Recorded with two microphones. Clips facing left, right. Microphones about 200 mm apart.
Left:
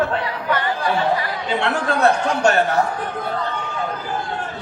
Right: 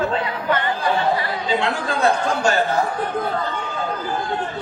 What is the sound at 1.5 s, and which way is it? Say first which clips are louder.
Speech: left 2 dB; 65° left (ahead or behind).